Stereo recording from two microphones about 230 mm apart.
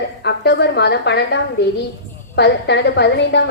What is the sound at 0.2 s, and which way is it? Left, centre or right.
A woman's voice, left.